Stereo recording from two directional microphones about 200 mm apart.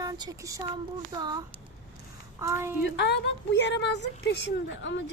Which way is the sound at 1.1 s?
20° right (ahead or behind).